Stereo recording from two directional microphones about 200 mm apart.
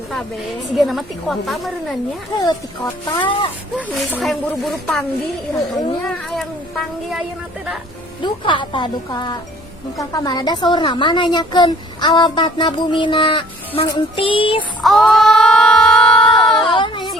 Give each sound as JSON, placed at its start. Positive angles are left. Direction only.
{"t": 0.8, "sound": "speech", "side_deg": 0}
{"t": 2.3, "sound": "a woman's voice", "side_deg": 20}
{"t": 3.8, "sound": "speech", "side_deg": 0}
{"t": 8.2, "sound": "a woman's voice", "side_deg": 25}
{"t": 14.8, "sound": "female singing", "side_deg": 5}
{"t": 16.4, "sound": "a sound", "side_deg": 0}
{"t": 16.6, "sound": "a sound", "side_deg": 25}